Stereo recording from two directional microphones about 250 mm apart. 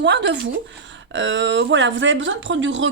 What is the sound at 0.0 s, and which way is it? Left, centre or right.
Speech, right.